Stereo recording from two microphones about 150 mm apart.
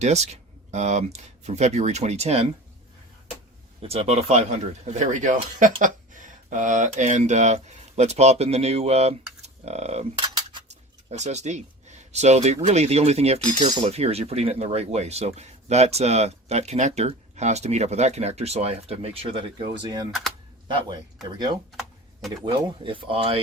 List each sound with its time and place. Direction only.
0.0 s speech: 50° right (ahead or behind)
3.8 s speech: 45° right (ahead or behind)
5.1 s speech: 60° right (ahead or behind)
10.7 s a sound: 50° right (ahead or behind)
12.6 s speech: 45° right (ahead or behind); by 20.1 s 30° right (ahead or behind)
20.1 s speech: centre (ahead or behind)
21.3 s speech: 30° right (ahead or behind)